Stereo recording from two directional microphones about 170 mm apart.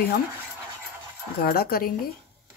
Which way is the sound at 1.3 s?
65° left (ahead or behind).